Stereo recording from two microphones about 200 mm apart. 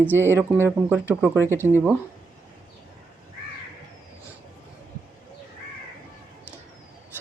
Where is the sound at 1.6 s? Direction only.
10° right (ahead or behind).